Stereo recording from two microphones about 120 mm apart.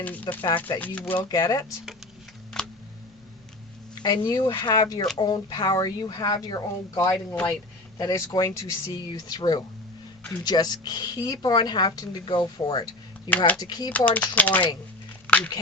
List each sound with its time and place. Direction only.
0.0 s speech: 15° left (ahead or behind)
0.4 s speech: 45° left (ahead or behind)
0.8 s speech: 15° left (ahead or behind)
1.2 s speech: 30° left (ahead or behind)
2.5 s a sound: 5° left (ahead or behind)
3.9 s speech: 35° left (ahead or behind)
13.9 s speech: 15° left (ahead or behind)